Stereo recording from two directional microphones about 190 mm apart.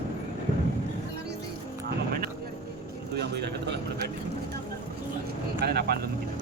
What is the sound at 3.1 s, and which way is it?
Speech, 60° right (ahead or behind).